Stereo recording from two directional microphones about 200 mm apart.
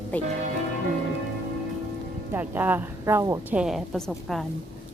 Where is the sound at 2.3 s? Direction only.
10° right (ahead or behind).